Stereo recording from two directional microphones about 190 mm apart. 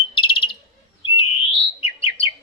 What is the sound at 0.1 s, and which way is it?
Bird, 25° left (ahead or behind).